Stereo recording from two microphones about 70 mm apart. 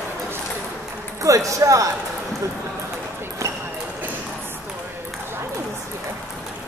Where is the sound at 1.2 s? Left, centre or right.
Right.